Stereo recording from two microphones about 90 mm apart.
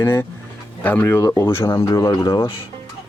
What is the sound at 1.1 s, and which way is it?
Speech, 35° left (ahead or behind).